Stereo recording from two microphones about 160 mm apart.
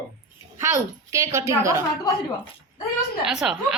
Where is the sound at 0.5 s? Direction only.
20° right (ahead or behind).